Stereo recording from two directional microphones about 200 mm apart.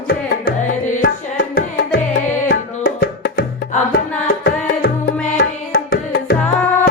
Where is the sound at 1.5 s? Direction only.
55° left (ahead or behind).